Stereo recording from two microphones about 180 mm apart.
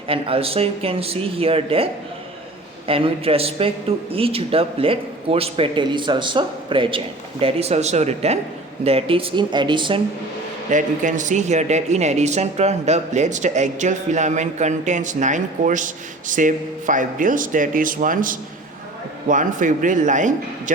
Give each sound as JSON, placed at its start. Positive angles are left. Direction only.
{"t": 0.1, "sound": "a man's voice", "side_deg": -30}
{"t": 10.7, "sound": "speech", "side_deg": -45}